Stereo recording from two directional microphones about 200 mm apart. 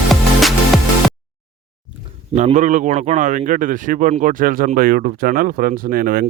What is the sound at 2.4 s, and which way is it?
A man's voice, 35° right (ahead or behind).